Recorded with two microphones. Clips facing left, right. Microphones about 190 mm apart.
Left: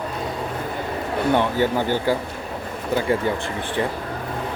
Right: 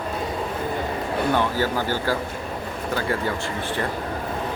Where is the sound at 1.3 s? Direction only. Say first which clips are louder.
Left 4 dB; 20° left (ahead or behind).